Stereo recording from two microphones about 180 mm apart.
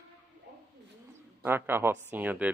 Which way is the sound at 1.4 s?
10° right (ahead or behind).